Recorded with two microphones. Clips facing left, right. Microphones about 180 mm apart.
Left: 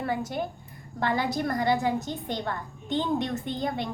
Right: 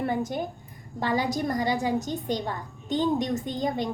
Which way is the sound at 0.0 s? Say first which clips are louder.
Right 2 dB; 20° right (ahead or behind).